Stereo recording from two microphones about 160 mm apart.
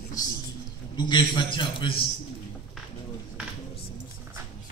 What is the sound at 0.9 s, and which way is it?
A man's voice, 30° left (ahead or behind).